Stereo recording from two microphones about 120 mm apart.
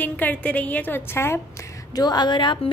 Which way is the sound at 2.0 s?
35° left (ahead or behind).